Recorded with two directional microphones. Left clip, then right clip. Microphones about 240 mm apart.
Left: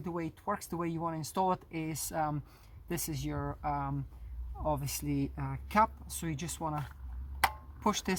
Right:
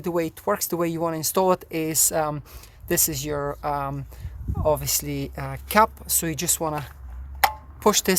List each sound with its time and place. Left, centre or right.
0.0 s speech: right